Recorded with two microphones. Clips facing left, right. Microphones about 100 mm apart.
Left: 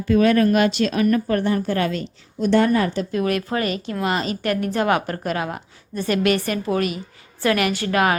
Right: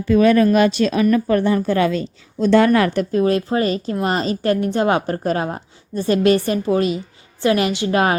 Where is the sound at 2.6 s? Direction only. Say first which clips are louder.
Right 4 dB; 80° right.